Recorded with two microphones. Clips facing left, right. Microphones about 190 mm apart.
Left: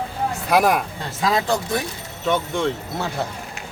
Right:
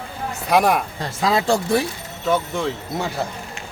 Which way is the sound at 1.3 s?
30° right (ahead or behind).